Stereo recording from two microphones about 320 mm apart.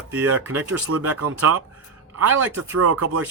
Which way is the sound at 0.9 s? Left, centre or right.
Right.